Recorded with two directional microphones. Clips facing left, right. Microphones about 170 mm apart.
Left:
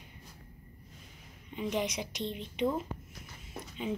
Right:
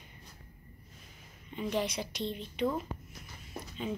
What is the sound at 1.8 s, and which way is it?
Speech, 15° left (ahead or behind).